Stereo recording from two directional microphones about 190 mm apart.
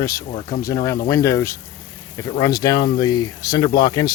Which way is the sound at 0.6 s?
20° left (ahead or behind).